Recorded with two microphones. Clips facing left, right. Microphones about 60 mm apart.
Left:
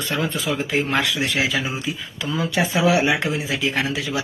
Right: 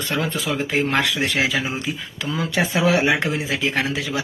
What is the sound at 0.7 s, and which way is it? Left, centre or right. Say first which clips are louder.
Speech: right 2 dB; right.